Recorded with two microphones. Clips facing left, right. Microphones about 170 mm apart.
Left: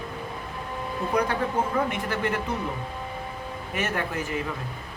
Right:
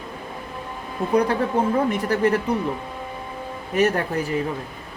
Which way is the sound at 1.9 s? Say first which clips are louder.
Right 7 dB; 40° right (ahead or behind).